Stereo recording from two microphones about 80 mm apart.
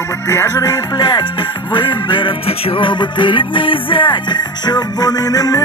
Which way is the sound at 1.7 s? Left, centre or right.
Left.